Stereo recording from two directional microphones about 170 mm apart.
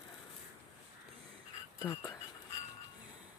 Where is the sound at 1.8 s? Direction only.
20° left (ahead or behind).